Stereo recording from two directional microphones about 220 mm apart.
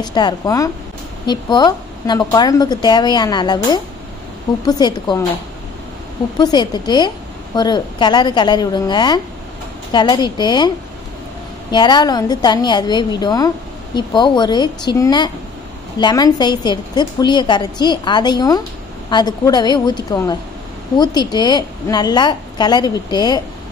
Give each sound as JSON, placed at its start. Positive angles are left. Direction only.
{"t": 0.0, "sound": "a woman's voice", "side_deg": 20}
{"t": 6.3, "sound": "a woman's voice", "side_deg": 20}
{"t": 11.7, "sound": "a woman's voice", "side_deg": 20}